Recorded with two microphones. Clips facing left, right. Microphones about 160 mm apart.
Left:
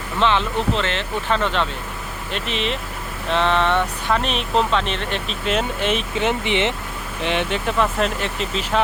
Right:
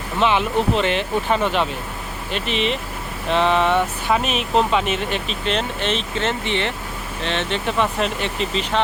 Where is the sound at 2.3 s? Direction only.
Centre (ahead or behind).